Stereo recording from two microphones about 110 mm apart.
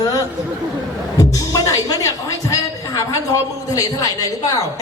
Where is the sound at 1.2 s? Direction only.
35° left (ahead or behind).